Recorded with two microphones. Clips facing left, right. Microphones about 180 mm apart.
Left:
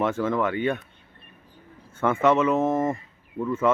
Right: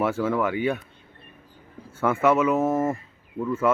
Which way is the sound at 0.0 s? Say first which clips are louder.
Even; 10° right (ahead or behind).